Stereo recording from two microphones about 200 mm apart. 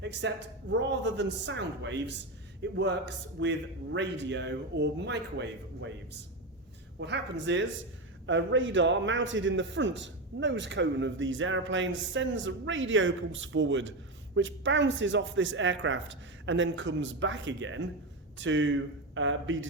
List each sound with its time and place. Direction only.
0.0 s a man's voice: 60° right (ahead or behind)